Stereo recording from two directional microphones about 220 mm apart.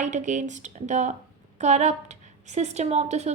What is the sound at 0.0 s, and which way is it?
A woman's voice, 35° right (ahead or behind).